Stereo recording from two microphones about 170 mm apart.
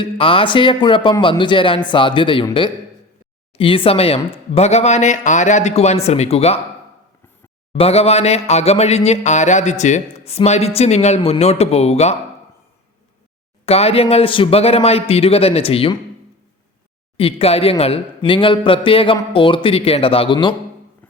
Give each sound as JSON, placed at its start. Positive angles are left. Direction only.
{"t": 0.0, "sound": "a man's voice", "side_deg": 30}
{"t": 7.7, "sound": "a man's voice", "side_deg": 35}
{"t": 13.7, "sound": "a man's voice", "side_deg": 35}
{"t": 17.2, "sound": "a man's voice", "side_deg": 35}